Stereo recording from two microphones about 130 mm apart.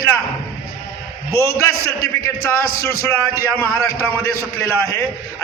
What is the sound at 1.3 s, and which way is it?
A man's voice, 20° left (ahead or behind).